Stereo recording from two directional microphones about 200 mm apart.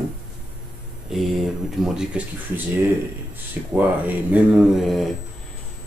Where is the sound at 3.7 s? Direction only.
10° right (ahead or behind).